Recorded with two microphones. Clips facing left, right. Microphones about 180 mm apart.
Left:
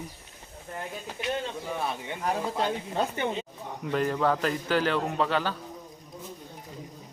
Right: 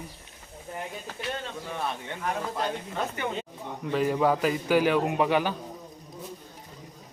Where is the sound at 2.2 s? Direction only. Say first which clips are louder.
Left 2 dB; 35° left (ahead or behind).